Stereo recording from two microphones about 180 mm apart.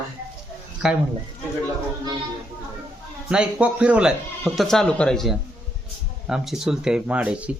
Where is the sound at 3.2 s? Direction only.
5° right (ahead or behind).